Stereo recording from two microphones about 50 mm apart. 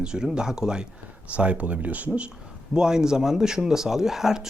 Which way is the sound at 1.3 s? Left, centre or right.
Right.